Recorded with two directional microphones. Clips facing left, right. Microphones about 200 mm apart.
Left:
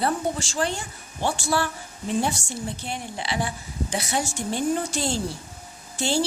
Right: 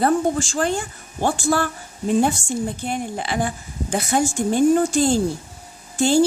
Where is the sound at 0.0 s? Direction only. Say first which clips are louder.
Right 7 dB; 50° right (ahead or behind).